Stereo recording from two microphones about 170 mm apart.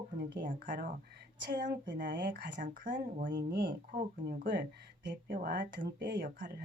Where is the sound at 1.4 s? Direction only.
90° right; by 4.0 s 75° right (ahead or behind).